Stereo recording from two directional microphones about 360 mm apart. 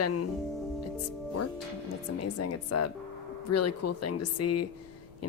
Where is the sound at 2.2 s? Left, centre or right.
Left.